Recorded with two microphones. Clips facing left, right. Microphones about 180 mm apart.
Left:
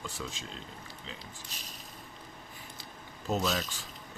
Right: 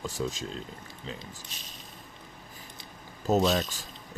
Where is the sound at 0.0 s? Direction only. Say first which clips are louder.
Right 8 dB; 40° right (ahead or behind).